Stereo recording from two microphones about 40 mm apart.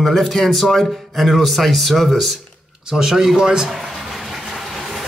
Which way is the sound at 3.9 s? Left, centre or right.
Centre.